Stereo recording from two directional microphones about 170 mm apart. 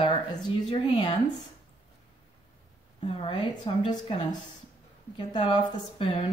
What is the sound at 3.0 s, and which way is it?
A woman's voice, 30° left (ahead or behind).